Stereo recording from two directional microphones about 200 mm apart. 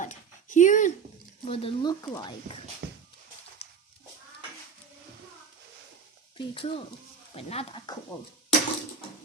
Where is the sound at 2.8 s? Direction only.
60° right (ahead or behind).